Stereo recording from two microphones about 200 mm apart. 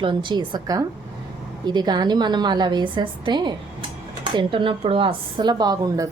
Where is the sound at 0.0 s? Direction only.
25° right (ahead or behind).